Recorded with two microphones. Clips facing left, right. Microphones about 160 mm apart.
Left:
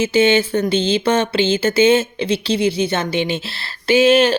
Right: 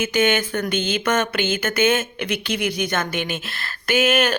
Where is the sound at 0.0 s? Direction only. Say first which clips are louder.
Left 5 dB; 30° left (ahead or behind).